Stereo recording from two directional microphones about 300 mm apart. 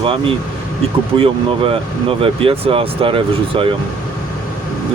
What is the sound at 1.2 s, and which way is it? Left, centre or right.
Speech, centre.